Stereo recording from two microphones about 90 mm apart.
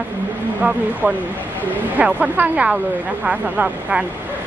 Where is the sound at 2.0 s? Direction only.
15° right (ahead or behind).